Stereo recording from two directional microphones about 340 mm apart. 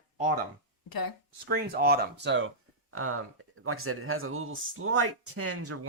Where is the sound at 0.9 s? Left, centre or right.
Left.